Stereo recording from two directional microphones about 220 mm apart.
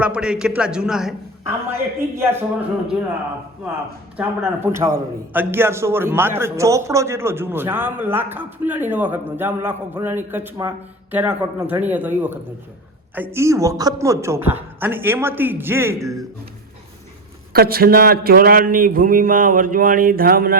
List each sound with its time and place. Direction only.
0.0 s a man's voice: 5° right (ahead or behind)
4.2 s a man's voice: 10° right (ahead or behind)
17.5 s speech: 45° right (ahead or behind)